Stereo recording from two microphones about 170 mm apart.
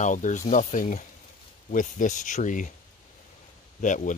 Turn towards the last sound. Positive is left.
turn(degrees=50)  # may be behind; listen again after turning